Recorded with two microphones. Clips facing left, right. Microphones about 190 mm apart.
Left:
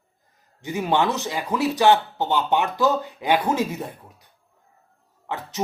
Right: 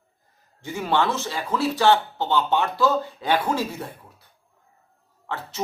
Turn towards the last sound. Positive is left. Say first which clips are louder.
# left 1 dB
turn(degrees=15)  # may be behind; listen again after turning